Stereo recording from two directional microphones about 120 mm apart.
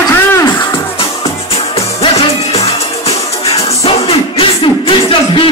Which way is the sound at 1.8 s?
55° left (ahead or behind).